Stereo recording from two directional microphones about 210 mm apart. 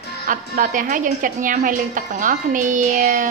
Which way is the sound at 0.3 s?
40° right (ahead or behind).